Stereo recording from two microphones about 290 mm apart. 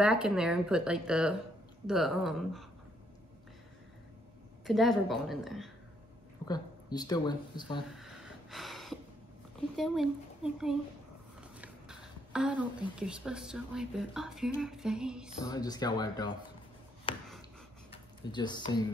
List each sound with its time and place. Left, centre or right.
0.0 s speech: centre
4.6 s speech: centre
6.4 s speech: centre
7.9 s a sound: centre
9.8 s speech: centre
15.4 s speech: centre
17.1 s a sound: centre
17.9 s speech: centre